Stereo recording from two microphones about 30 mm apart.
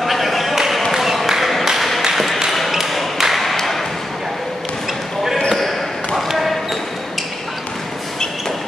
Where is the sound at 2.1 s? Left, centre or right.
Centre.